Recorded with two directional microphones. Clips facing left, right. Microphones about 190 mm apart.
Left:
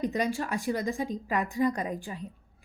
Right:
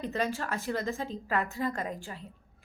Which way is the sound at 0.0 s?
15° left (ahead or behind).